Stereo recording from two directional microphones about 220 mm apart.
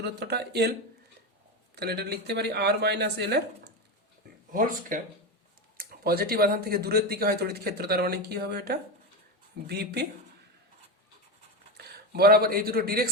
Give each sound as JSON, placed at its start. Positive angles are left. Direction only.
{"t": 0.0, "sound": "speech", "side_deg": -50}
{"t": 4.5, "sound": "speech", "side_deg": -40}
{"t": 11.8, "sound": "speech", "side_deg": -45}